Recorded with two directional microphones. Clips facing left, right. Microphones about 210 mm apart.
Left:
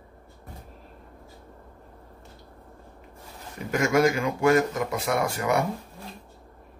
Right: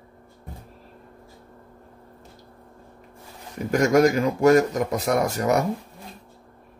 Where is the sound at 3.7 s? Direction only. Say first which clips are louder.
Right 4 dB; 40° right (ahead or behind).